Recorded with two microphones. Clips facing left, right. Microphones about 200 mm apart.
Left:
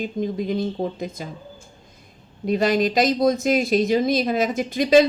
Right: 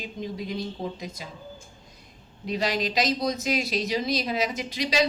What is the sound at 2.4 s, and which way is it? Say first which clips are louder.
A woman's voice: left 8 dB; 50° left (ahead or behind).